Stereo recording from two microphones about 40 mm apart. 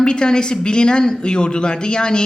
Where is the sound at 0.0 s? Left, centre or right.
Left.